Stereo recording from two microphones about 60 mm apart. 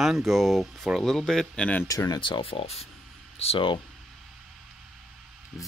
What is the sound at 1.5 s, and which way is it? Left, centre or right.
Speech, left.